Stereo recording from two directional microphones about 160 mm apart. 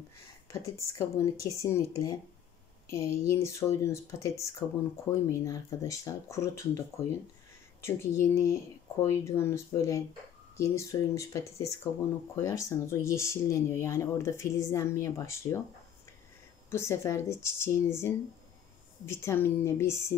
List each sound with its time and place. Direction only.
0.5 s speech: 20° left (ahead or behind)
7.8 s speech: 15° left (ahead or behind)
16.7 s speech: 15° left (ahead or behind)